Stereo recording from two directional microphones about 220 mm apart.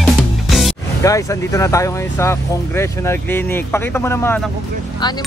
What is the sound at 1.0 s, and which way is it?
Speech, 15° left (ahead or behind).